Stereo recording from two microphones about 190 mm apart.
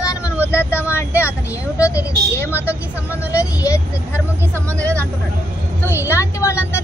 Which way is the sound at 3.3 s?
15° left (ahead or behind).